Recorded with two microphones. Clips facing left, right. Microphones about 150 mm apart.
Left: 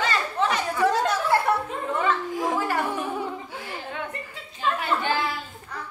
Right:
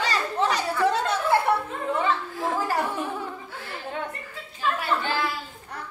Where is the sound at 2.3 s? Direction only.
15° left (ahead or behind).